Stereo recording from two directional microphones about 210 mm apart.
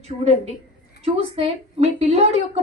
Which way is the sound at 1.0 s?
25° right (ahead or behind).